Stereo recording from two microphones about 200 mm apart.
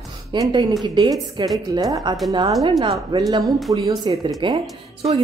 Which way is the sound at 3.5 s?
Centre (ahead or behind).